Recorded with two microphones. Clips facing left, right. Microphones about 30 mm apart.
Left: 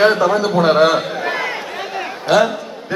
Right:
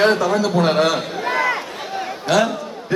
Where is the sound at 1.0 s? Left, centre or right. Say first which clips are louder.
Left 3 dB; left.